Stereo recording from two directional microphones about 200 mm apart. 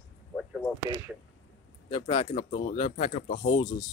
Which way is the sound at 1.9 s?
25° left (ahead or behind).